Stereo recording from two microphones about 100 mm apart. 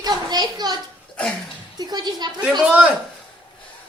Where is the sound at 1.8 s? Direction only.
45° right (ahead or behind).